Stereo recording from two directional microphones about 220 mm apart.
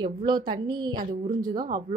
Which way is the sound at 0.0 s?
20° right (ahead or behind).